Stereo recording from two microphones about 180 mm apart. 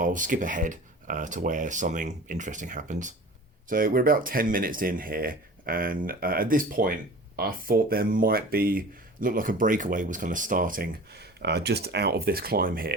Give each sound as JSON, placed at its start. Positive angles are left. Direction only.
{"t": 0.0, "sound": "speech", "side_deg": -45}